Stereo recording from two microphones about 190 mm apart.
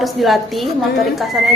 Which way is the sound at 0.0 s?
Centre (ahead or behind).